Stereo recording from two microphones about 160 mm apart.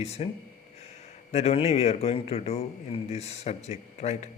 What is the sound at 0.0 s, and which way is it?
Speech, 40° left (ahead or behind).